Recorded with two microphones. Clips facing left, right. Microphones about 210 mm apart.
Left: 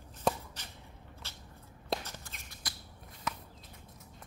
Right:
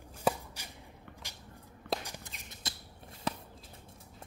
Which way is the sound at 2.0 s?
15° right (ahead or behind).